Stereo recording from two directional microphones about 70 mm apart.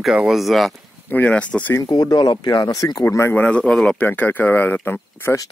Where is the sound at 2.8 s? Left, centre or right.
Left.